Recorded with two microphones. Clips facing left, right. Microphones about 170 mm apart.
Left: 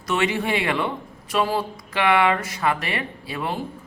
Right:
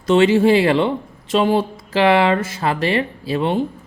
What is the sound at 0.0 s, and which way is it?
A man's voice, 30° right (ahead or behind).